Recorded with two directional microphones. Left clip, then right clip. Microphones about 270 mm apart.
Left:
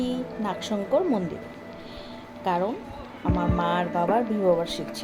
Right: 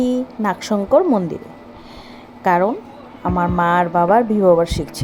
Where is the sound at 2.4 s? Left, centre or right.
Right.